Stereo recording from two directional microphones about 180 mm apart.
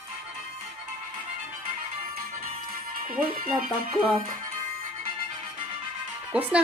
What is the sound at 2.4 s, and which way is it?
Music, 50° right (ahead or behind).